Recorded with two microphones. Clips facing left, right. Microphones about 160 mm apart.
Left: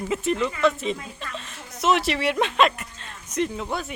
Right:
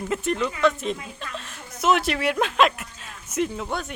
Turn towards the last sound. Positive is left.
turn(degrees=0)  # may be behind; listen again after turning